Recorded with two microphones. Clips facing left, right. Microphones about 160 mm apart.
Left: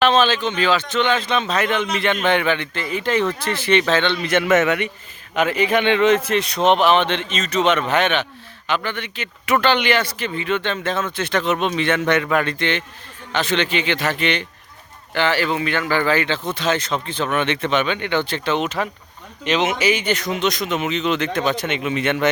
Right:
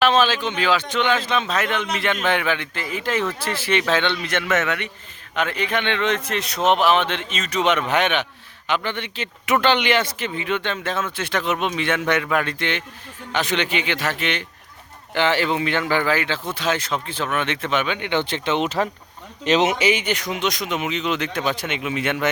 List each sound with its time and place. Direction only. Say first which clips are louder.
0.0 s speech: left 2 dB; 10° right (ahead or behind)
4.3 s a man's voice: left 6 dB; 10° left (ahead or behind); by 14.4 s 5° right (ahead or behind)
15.1 s speech: even; 20° right (ahead or behind)
16.0 s speech: left 3 dB; 5° right (ahead or behind)
18.1 s speech: right 2 dB; 20° right (ahead or behind); by 19.7 s 35° right (ahead or behind)
19.8 s speech: left 1 dB; 20° right (ahead or behind)